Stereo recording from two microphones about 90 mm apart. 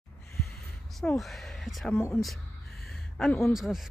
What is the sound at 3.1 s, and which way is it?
Speech, 10° left (ahead or behind).